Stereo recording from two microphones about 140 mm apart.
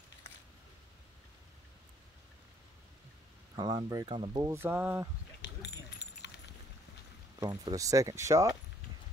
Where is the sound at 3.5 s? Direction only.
30° right (ahead or behind).